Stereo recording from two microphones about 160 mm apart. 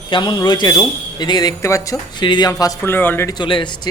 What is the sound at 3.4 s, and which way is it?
Speech, 30° left (ahead or behind).